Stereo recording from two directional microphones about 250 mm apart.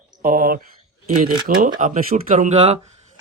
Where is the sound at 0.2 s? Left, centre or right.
Right.